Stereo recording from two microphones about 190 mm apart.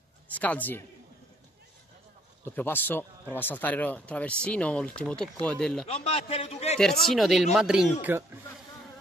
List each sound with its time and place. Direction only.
0.3 s speech: 10° left (ahead or behind)
2.4 s speech: 10° left (ahead or behind)
5.9 s a man's voice: 30° left (ahead or behind)
6.8 s speech: centre (ahead or behind)